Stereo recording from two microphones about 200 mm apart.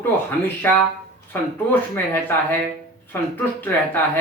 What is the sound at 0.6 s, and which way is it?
A woman's voice, 10° left (ahead or behind).